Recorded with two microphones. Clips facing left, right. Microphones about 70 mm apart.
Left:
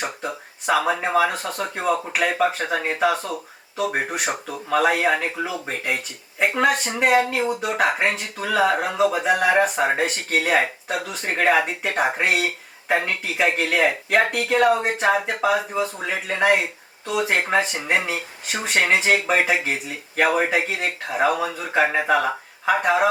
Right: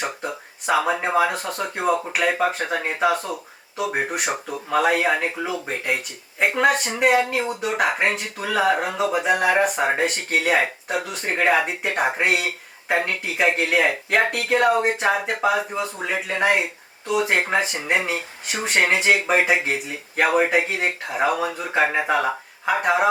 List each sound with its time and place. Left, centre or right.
0.0 s speech: centre
6.4 s a sound: centre
6.7 s speech: centre